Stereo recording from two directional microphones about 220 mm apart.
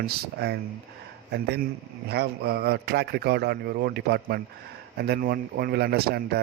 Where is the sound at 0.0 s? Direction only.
45° right (ahead or behind).